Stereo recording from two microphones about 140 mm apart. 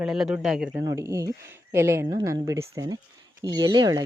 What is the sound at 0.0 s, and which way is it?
Speech, centre (ahead or behind).